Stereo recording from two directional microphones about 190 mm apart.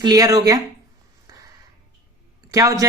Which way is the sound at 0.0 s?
20° right (ahead or behind).